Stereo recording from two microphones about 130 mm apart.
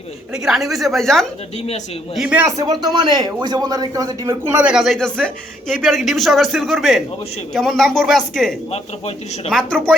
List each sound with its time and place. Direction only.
0.3 s a man's voice: 5° right (ahead or behind)
1.5 s speech: 55° left (ahead or behind)
2.1 s a man's voice: 10° right (ahead or behind)
2.6 s speech: 30° right (ahead or behind)
4.5 s a man's voice: 5° right (ahead or behind)
8.7 s a man's voice: 55° left (ahead or behind)
9.5 s a man's voice: 5° left (ahead or behind)